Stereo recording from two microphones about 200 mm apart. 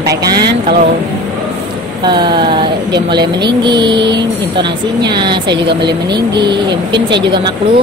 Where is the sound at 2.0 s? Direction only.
25° right (ahead or behind).